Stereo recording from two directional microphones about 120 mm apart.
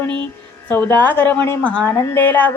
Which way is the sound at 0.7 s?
15° left (ahead or behind).